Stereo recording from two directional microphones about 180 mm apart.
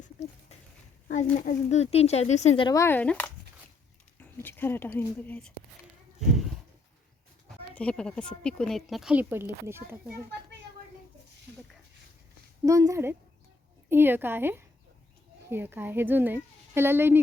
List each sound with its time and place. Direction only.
0.2 s a sound: 40° left (ahead or behind)
1.5 s speech: 35° left (ahead or behind)
2.6 s speech: 15° left (ahead or behind)
7.8 s speech: 5° left (ahead or behind); by 9.8 s 15° right (ahead or behind)
12.6 s speech: 20° right (ahead or behind)